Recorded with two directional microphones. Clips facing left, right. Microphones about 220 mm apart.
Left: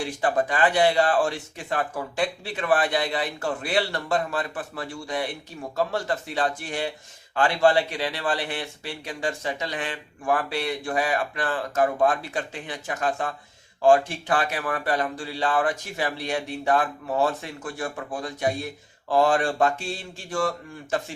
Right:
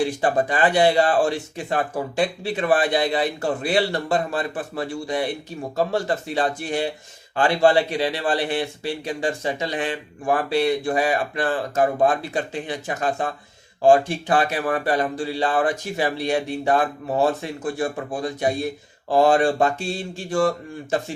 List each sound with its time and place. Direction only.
0.2 s a man's voice: 30° right (ahead or behind)